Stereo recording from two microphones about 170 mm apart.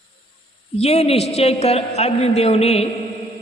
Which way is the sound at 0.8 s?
35° left (ahead or behind).